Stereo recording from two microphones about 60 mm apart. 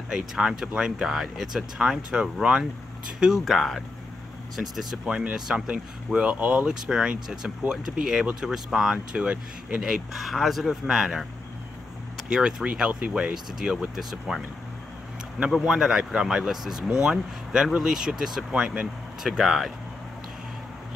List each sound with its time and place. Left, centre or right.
0.1 s speech: centre
3.4 s speech: centre
4.6 s speech: centre
6.1 s speech: centre
8.9 s speech: centre
9.8 s speech: centre
15.6 s speech: centre
18.5 s speech: right
19.2 s speech: centre